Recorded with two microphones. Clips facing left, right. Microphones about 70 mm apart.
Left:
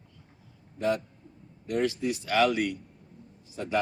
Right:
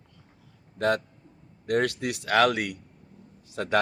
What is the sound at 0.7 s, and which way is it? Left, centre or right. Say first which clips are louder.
A man's voice: right 3 dB; right.